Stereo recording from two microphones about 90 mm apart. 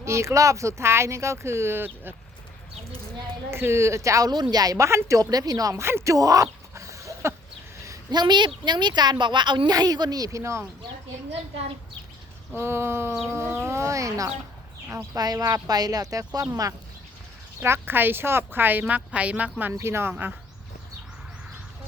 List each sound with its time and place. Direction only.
0.0 s speech: 35° right (ahead or behind)
3.5 s a woman's voice: 30° right (ahead or behind); by 4.9 s 45° right (ahead or behind)
4.9 s speech: 35° right (ahead or behind)
5.8 s speech: 30° right (ahead or behind)
6.1 s a sound: 40° right (ahead or behind)
8.1 s a woman's voice: 55° right (ahead or behind); by 10.6 s 35° right (ahead or behind)
12.5 s a woman's voice: 30° right (ahead or behind)
17.6 s speech: 25° right (ahead or behind)
19.7 s speech: 30° right (ahead or behind)